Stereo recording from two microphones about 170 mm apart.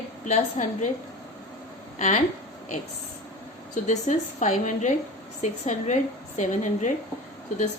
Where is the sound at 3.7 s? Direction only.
45° left (ahead or behind).